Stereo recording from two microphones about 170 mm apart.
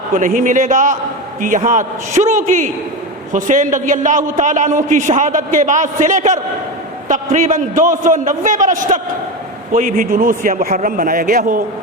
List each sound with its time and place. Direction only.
0.1 s a man's voice: 50° right (ahead or behind)